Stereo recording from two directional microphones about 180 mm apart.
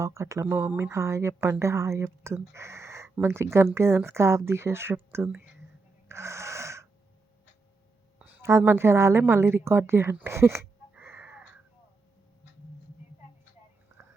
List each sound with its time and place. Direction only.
0.0 s speech: 15° right (ahead or behind)
6.1 s a sound: 15° right (ahead or behind)
8.2 s a woman's voice: 10° right (ahead or behind)